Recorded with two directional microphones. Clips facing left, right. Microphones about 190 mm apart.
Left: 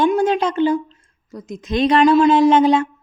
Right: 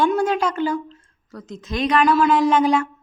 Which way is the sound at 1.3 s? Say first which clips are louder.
Left 5 dB; 10° left (ahead or behind).